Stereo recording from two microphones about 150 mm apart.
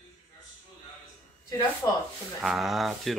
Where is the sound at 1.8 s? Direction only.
20° left (ahead or behind).